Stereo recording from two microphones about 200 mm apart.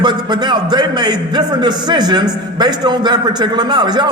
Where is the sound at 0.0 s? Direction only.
20° right (ahead or behind).